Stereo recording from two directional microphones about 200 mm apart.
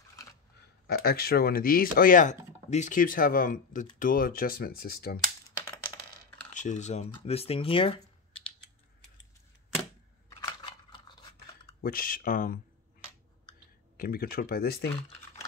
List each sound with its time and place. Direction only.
0.6 s speech: 50° left (ahead or behind)
6.5 s speech: 40° left (ahead or behind)
10.4 s a sound: 20° left (ahead or behind)
11.8 s speech: 45° left (ahead or behind)
13.9 s speech: 45° left (ahead or behind)